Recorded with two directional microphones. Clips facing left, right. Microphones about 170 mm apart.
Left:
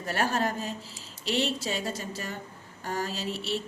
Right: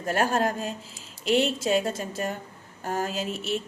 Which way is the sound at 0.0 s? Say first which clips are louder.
Right 4 dB; 45° right (ahead or behind).